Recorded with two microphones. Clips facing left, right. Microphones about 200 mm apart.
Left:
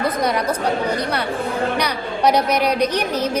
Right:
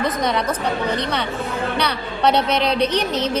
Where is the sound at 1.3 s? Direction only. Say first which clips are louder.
Left 3 dB; 30° left (ahead or behind).